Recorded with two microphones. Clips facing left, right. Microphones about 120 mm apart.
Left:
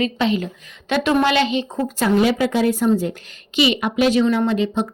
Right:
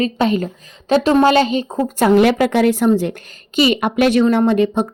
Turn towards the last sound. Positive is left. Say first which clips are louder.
# right 5 dB
turn(degrees=-50)  # may be behind; listen again after turning